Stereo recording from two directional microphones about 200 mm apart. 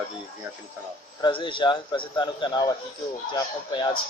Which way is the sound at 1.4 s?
25° left (ahead or behind).